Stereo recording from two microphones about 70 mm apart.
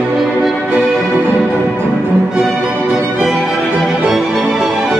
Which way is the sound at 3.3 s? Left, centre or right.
Centre.